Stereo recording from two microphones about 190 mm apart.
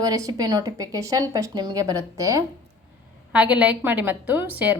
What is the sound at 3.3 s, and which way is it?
A woman's voice, 5° right (ahead or behind).